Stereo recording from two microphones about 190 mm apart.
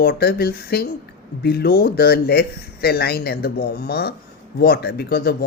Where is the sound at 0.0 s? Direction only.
55° left (ahead or behind).